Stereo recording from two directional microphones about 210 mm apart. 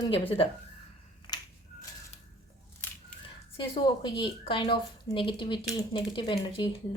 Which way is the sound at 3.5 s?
25° left (ahead or behind).